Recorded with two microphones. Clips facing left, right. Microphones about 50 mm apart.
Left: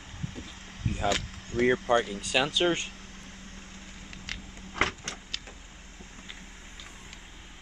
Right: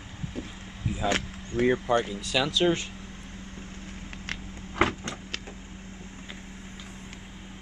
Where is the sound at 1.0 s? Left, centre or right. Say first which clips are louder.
Right 1 dB; right.